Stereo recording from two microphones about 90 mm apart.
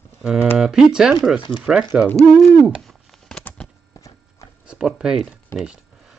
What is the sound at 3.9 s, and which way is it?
Clip-clop, 35° left (ahead or behind).